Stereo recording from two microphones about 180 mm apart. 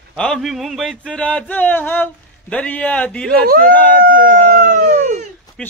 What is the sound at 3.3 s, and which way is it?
Speech, 55° right (ahead or behind).